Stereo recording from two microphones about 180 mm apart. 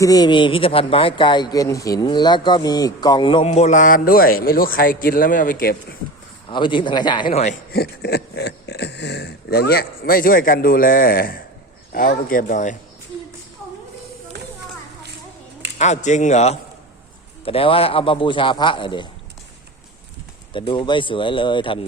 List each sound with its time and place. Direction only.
0.0 s speech: 20° left (ahead or behind); by 5.7 s 50° left (ahead or behind)
6.5 s speech: 25° left (ahead or behind)
7.7 s speech: 60° left (ahead or behind)
15.8 s speech: 40° left (ahead or behind)
20.5 s speech: 25° left (ahead or behind)